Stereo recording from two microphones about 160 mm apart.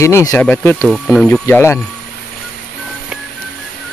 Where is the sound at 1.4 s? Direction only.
15° left (ahead or behind).